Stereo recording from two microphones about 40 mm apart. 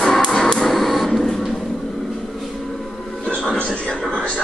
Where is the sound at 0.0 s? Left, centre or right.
Centre.